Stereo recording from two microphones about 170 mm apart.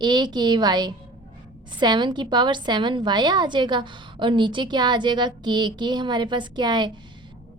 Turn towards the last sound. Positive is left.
turn(degrees=-25)  # may be behind; listen again after turning